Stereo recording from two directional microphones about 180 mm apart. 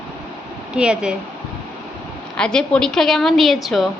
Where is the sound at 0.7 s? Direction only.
5° right (ahead or behind).